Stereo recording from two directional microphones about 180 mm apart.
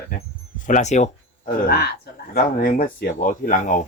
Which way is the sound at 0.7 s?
40° left (ahead or behind).